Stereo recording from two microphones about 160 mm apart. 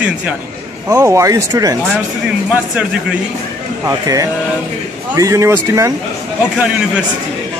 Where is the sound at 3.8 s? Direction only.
20° right (ahead or behind).